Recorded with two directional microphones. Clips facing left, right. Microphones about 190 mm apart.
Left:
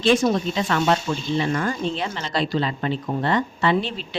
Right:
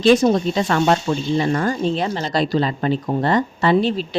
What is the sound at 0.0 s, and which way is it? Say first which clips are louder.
Speech: right 5 dB; 40° right (ahead or behind).